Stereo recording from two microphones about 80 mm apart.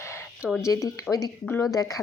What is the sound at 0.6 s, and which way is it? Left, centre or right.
Speech, left.